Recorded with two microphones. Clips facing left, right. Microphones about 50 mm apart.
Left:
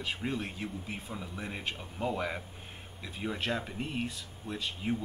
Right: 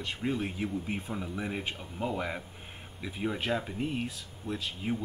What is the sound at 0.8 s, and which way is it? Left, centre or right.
Speech, right.